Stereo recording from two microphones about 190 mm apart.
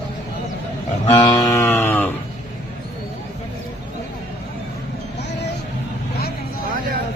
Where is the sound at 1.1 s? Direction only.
20° left (ahead or behind).